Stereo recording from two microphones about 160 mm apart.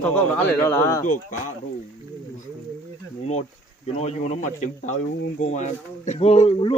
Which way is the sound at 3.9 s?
45° left (ahead or behind).